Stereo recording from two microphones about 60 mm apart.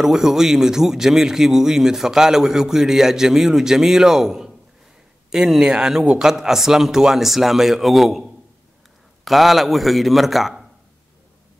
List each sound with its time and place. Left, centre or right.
0.0 s speech: centre